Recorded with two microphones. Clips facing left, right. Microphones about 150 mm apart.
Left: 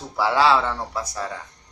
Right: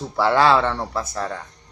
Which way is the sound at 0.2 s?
55° right (ahead or behind).